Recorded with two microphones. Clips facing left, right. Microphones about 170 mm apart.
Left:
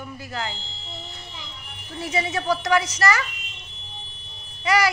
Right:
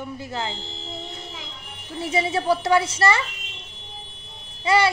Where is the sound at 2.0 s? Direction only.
30° right (ahead or behind).